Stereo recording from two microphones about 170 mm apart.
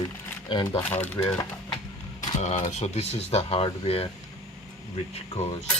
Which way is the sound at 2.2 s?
45° left (ahead or behind).